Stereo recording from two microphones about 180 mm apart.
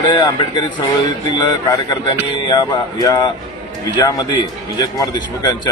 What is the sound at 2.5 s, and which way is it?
Speech, 20° left (ahead or behind).